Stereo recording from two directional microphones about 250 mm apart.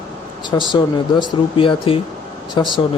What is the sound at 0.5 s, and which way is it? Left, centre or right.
Speech, centre.